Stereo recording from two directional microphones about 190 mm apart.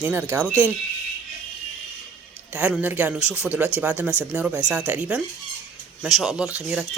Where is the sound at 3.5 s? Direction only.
5° right (ahead or behind).